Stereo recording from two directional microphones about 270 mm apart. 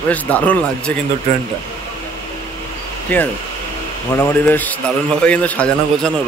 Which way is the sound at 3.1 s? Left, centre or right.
Centre.